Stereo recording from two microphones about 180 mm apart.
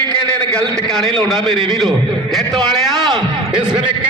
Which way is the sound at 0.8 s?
5° left (ahead or behind).